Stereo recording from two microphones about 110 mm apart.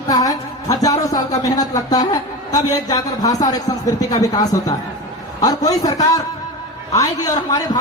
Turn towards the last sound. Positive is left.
turn(degrees=35)  # may be behind; listen again after turning